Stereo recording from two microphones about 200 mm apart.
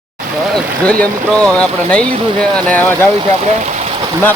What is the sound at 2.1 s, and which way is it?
Speech, 25° right (ahead or behind).